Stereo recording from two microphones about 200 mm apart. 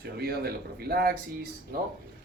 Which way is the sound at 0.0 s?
50° right (ahead or behind).